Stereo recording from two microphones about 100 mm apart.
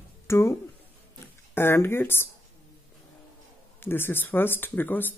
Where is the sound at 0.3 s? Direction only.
30° left (ahead or behind).